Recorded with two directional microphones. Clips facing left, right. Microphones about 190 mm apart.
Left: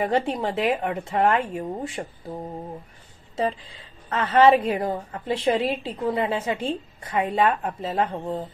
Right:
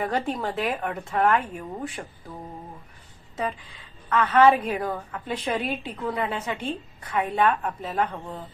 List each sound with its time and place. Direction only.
0.0 s a woman's voice: 20° left (ahead or behind)
4.1 s a woman's voice: 25° left (ahead or behind)